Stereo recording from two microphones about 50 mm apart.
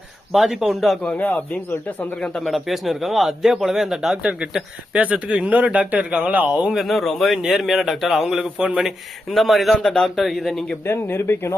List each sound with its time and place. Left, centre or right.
0.3 s speech: centre
1.2 s speech: left
2.4 s speech: centre
4.3 s speech: right
6.0 s speech: centre
6.2 s speech: right
6.8 s speech: centre
9.8 s speech: centre
10.2 s speech: centre
10.8 s speech: left